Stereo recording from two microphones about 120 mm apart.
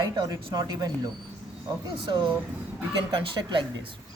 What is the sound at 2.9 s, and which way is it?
Speech, 40° right (ahead or behind).